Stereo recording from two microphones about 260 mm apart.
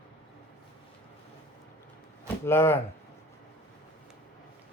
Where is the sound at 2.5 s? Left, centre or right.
Centre.